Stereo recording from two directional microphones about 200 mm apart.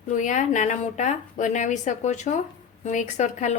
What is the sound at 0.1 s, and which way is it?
A woman's voice, 40° left (ahead or behind).